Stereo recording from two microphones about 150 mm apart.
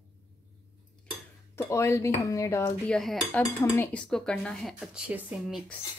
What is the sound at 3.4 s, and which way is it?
Speech, 20° left (ahead or behind).